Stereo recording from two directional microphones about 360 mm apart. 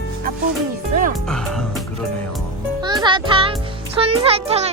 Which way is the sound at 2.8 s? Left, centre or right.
Centre.